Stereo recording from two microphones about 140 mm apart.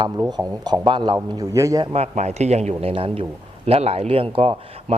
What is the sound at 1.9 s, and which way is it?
A man's voice, 50° right (ahead or behind).